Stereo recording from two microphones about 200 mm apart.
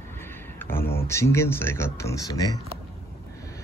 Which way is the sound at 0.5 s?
10° left (ahead or behind).